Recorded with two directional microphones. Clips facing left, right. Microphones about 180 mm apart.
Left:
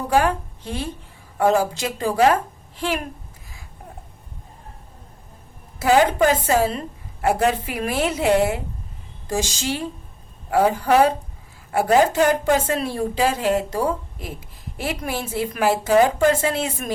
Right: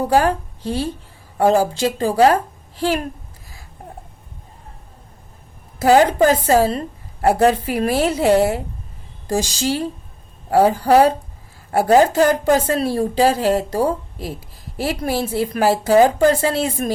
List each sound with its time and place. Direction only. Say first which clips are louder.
0.1 s a woman's voice: left 1 dB; 35° right (ahead or behind)
6.2 s a woman's voice: right 4 dB; 35° right (ahead or behind)